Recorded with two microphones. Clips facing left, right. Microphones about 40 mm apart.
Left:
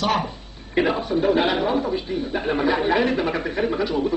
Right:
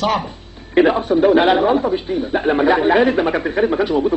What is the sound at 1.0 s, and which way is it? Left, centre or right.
A man's voice, right.